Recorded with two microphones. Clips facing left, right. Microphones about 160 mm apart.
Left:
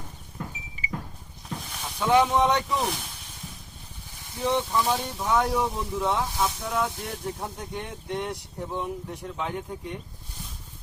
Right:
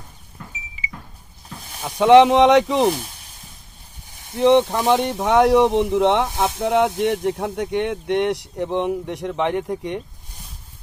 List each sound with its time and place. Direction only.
2.0 s speech: 90° right
4.4 s speech: 65° right (ahead or behind); by 6.2 s 85° right
6.3 s speech: 70° right (ahead or behind)